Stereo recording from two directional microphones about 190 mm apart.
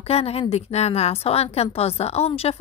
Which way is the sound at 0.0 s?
30° left (ahead or behind).